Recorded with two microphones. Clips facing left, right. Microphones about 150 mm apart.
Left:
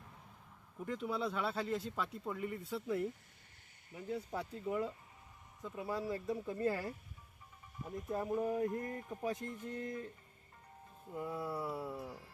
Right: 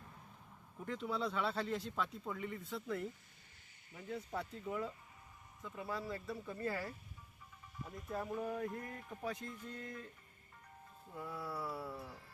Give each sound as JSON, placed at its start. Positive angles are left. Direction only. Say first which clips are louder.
{"t": 0.8, "sound": "speech", "louder": "left 1 dB", "side_deg": 0}
{"t": 11.1, "sound": "speech", "louder": "left 5 dB", "side_deg": 20}